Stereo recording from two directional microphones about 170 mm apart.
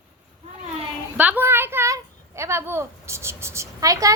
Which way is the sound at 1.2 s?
10° right (ahead or behind).